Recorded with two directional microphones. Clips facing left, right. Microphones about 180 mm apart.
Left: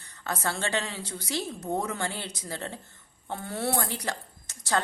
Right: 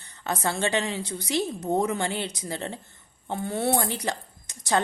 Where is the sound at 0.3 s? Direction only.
20° right (ahead or behind).